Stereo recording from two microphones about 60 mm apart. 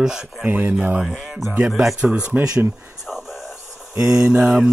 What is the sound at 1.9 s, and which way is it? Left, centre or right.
Speech, centre.